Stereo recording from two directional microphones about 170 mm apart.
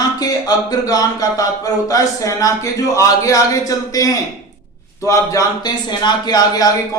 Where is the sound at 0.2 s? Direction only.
20° left (ahead or behind).